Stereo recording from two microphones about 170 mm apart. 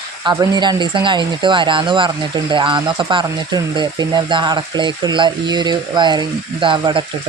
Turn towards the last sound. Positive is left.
turn(degrees=-30)  # may be behind; listen again after turning